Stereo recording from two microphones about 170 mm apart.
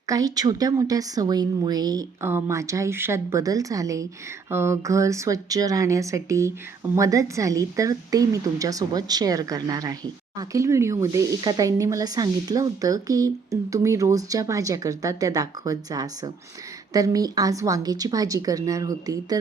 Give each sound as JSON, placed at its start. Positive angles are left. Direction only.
{"t": 0.1, "sound": "speech", "side_deg": -20}